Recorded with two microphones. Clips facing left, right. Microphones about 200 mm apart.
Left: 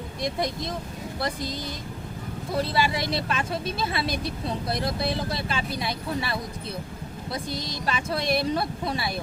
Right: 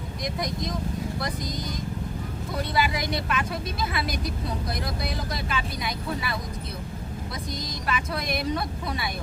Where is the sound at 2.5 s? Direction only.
30° left (ahead or behind).